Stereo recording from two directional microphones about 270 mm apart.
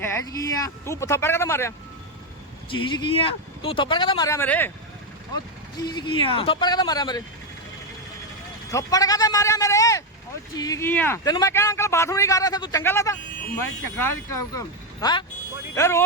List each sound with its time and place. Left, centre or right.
0.0 s speech: centre
5.9 s speech: centre
8.7 s a man's voice: centre
15.7 s speech: centre